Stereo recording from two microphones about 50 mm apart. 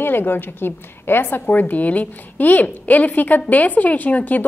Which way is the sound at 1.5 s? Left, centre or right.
Left.